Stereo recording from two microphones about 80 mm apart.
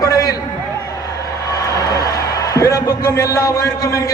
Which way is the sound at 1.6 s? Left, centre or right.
Left.